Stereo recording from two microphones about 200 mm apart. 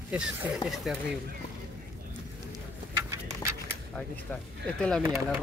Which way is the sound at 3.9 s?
5° left (ahead or behind).